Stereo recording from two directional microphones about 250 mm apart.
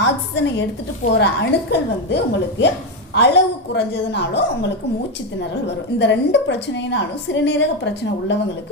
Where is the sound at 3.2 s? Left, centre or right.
Left.